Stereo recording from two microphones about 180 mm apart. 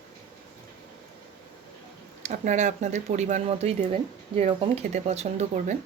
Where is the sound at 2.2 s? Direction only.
40° right (ahead or behind).